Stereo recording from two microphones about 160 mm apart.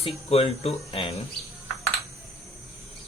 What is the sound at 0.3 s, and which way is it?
Speech, 40° left (ahead or behind).